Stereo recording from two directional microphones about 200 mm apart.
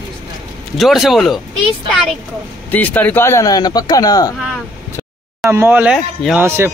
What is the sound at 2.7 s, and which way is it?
A man's voice, 10° left (ahead or behind).